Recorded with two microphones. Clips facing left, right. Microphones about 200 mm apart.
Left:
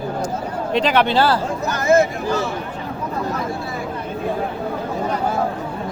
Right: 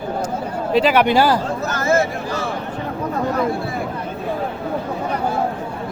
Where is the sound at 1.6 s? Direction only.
15° left (ahead or behind).